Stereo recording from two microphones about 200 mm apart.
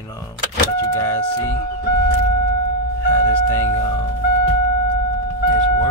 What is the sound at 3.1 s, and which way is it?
Speech, 15° left (ahead or behind).